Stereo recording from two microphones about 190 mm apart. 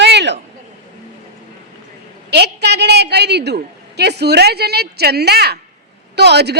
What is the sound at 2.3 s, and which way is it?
A woman's voice, 60° right (ahead or behind).